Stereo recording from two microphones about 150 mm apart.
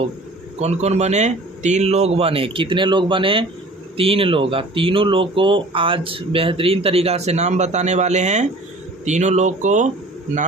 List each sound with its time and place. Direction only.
0.6 s a man's voice: 45° right (ahead or behind)